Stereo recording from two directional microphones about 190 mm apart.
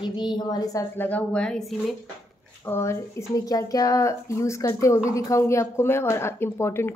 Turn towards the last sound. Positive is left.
turn(degrees=10)  # may be behind; listen again after turning